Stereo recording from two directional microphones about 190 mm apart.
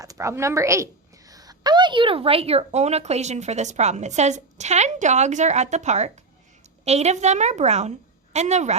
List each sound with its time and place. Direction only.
0.0 s a woman's voice: 15° right (ahead or behind); by 8.7 s 35° right (ahead or behind)